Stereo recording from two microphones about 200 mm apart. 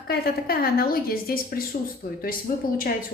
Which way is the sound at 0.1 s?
50° left (ahead or behind).